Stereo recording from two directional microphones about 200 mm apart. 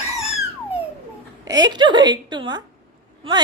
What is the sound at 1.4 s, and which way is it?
A woman's voice, 20° right (ahead or behind).